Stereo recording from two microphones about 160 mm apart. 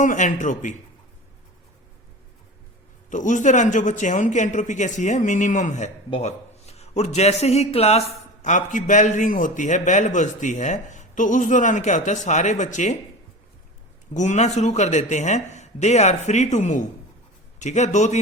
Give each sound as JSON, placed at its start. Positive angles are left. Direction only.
{"t": 0.0, "sound": "a man's voice", "side_deg": 50}
{"t": 3.1, "sound": "a man's voice", "side_deg": 50}
{"t": 14.1, "sound": "a man's voice", "side_deg": 50}